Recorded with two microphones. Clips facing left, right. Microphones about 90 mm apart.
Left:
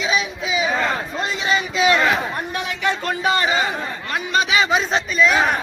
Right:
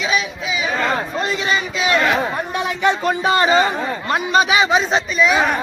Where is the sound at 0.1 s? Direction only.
25° left (ahead or behind).